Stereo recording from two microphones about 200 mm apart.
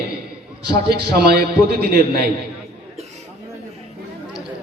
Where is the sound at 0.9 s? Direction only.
55° right (ahead or behind).